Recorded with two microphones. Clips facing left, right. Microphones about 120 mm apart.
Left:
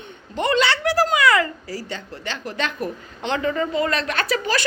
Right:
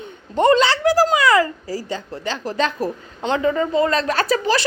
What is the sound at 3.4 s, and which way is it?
Speech, 15° right (ahead or behind).